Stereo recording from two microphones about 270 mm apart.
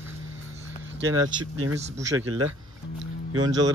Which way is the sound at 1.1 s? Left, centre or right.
Right.